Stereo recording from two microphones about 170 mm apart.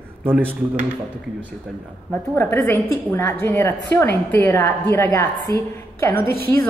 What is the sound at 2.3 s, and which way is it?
A woman's voice, 15° left (ahead or behind).